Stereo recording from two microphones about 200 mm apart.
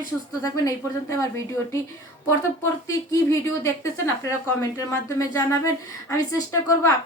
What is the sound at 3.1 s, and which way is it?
Speech, 15° left (ahead or behind).